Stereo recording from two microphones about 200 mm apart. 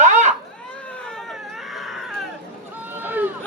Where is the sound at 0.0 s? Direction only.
35° right (ahead or behind).